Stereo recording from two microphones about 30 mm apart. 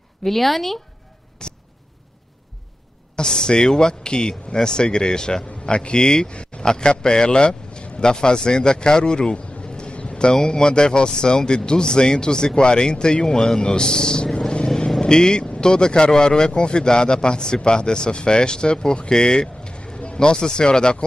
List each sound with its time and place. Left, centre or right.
0.2 s speech: centre
1.4 s a sound: left
3.2 s a man's voice: left
6.3 s a sound: left
6.6 s a man's voice: left
10.3 s a man's voice: left
20.2 s a man's voice: left